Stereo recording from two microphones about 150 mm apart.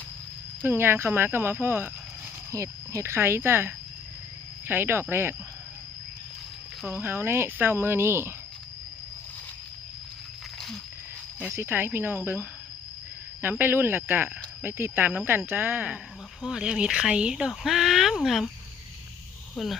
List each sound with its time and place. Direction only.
0.6 s speech: 15° right (ahead or behind)
6.9 s speech: 15° right (ahead or behind)
11.5 s speech: 15° right (ahead or behind)